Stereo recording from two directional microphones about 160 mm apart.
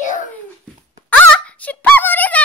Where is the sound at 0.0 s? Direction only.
50° left (ahead or behind).